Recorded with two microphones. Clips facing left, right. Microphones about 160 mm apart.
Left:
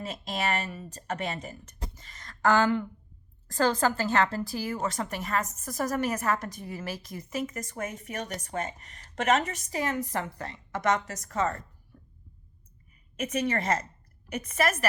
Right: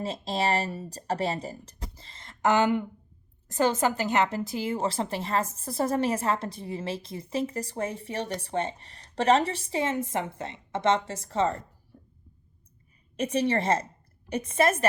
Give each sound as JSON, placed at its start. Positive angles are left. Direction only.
{"t": 0.0, "sound": "a woman's voice", "side_deg": -30}
{"t": 11.9, "sound": "a sound", "side_deg": -25}
{"t": 13.1, "sound": "a woman's voice", "side_deg": -30}